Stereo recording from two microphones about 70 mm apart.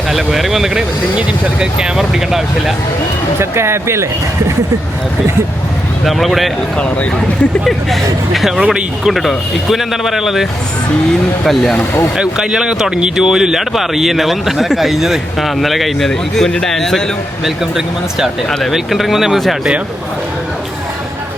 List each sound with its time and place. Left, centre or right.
0.1 s speech: centre
3.5 s speech: right
6.1 s speech: centre
7.6 s speech: centre
11.4 s speech: centre
12.1 s speech: centre